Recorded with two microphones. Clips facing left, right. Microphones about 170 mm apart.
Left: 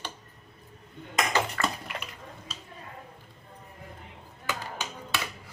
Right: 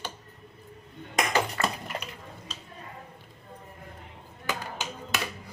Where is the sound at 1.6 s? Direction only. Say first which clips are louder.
Right 1 dB; 25° right (ahead or behind).